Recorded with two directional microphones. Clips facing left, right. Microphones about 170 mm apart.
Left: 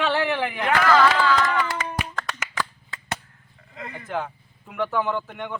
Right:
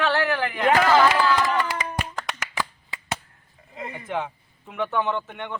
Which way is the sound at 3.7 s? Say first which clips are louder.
Right 2 dB; 25° right (ahead or behind).